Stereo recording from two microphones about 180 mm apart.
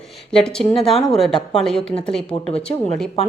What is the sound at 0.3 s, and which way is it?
Speech, 5° left (ahead or behind).